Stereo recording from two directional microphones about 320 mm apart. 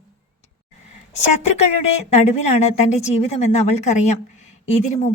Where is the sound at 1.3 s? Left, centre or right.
Centre.